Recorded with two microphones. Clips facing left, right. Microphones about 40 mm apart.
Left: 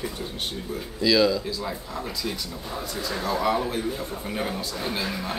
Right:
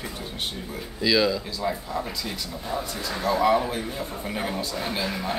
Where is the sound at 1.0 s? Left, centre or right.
Centre.